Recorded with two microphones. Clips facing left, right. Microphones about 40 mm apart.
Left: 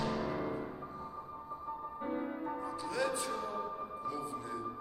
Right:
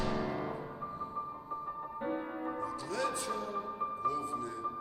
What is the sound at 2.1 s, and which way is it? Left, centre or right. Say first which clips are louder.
Music: left 2 dB; centre.